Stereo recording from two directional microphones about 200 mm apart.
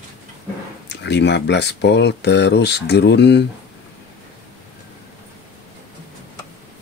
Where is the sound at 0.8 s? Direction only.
60° left (ahead or behind).